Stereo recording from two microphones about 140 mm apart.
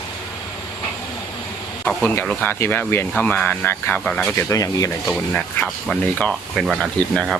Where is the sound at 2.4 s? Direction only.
15° left (ahead or behind).